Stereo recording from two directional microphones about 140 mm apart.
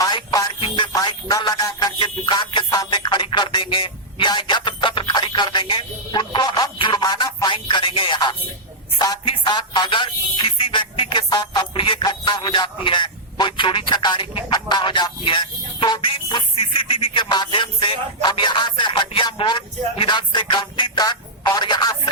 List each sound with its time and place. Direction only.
0.0 s music: 30° left (ahead or behind)
9.0 s a sound: 25° left (ahead or behind)
9.3 s music: 35° left (ahead or behind)